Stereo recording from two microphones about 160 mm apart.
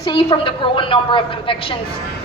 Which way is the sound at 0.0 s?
30° left (ahead or behind).